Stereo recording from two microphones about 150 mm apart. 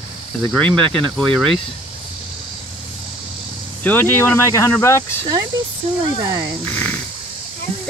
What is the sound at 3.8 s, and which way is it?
Speech, 10° left (ahead or behind).